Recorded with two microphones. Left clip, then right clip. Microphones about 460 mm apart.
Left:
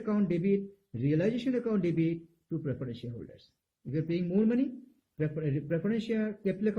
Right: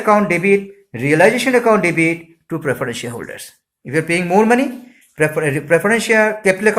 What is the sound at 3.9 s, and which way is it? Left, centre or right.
Speech, right.